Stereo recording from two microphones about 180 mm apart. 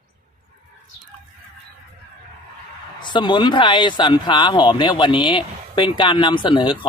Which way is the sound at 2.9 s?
25° left (ahead or behind).